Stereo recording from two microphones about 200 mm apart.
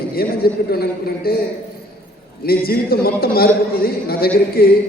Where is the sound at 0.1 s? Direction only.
50° left (ahead or behind).